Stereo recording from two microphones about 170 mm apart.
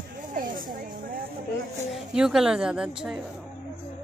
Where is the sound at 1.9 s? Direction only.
5° right (ahead or behind).